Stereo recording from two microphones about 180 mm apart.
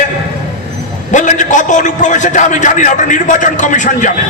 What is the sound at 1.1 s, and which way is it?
A man's voice, 45° left (ahead or behind).